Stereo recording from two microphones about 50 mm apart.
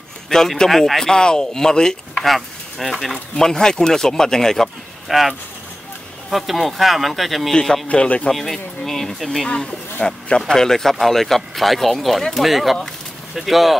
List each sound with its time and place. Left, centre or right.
0.3 s speech: centre
2.2 s speech: centre
3.3 s speech: centre
5.0 s speech: centre
6.3 s speech: centre
7.9 s speech: left
8.3 s speech: centre
10.0 s a man's voice: centre
12.4 s speech: centre